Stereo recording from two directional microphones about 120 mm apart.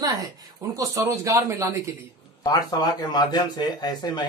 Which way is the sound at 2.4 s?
35° left (ahead or behind).